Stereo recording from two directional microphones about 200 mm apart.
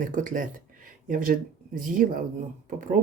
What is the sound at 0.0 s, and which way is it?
Speech, 40° right (ahead or behind).